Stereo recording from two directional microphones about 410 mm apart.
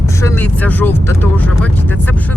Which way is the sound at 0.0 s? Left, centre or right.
Centre.